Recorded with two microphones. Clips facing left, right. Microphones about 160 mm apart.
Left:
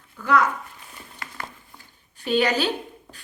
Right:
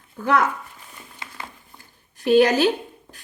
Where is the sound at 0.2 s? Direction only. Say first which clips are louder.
Right 1 dB; 55° right (ahead or behind).